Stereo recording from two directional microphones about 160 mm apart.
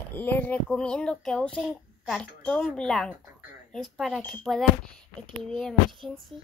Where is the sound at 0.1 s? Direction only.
10° left (ahead or behind).